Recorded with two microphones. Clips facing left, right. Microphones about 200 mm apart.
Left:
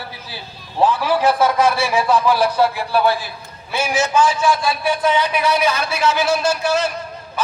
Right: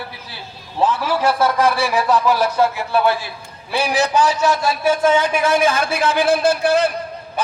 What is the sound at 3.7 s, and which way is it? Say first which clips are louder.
A man's voice: right 1 dB; 35° right (ahead or behind).